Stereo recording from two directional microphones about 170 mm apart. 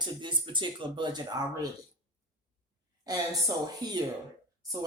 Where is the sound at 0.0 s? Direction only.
30° right (ahead or behind).